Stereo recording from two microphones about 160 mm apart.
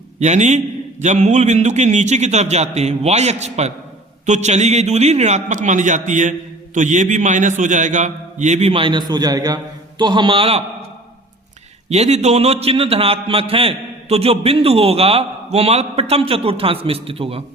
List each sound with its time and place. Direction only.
0.2 s a man's voice: 45° right (ahead or behind)
11.9 s a man's voice: 45° right (ahead or behind)